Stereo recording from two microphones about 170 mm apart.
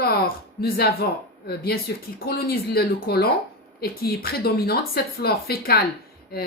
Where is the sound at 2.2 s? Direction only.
60° left (ahead or behind).